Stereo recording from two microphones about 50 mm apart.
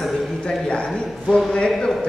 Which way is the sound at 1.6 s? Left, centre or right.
Centre.